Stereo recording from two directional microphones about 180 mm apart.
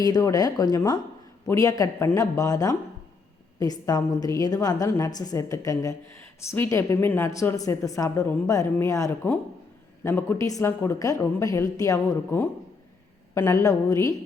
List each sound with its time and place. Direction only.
0.0 s a woman's voice: 20° left (ahead or behind)